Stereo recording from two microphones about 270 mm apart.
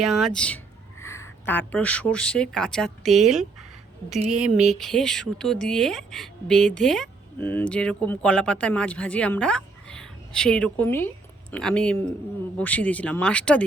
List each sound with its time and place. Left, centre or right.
0.0 s a woman's voice: centre
4.4 s a sound: right
4.7 s a woman's voice: centre